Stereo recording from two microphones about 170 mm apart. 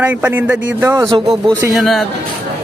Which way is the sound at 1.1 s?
30° right (ahead or behind).